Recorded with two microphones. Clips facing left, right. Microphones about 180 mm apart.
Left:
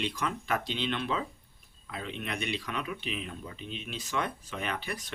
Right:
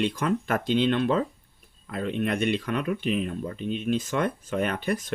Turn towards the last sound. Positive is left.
turn(degrees=-50)  # may be behind; listen again after turning